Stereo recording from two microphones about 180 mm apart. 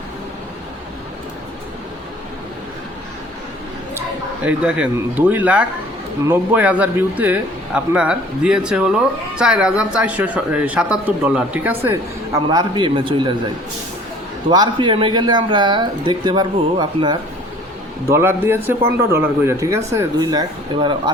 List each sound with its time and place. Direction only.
4.4 s speech: 10° right (ahead or behind)
12.5 s speech: 25° right (ahead or behind)
14.5 s speech: 25° right (ahead or behind)
18.1 s speech: 15° right (ahead or behind)